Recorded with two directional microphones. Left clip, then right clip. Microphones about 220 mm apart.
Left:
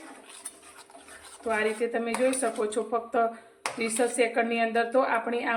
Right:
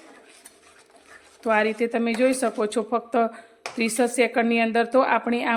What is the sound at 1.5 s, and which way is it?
Speech, 50° right (ahead or behind).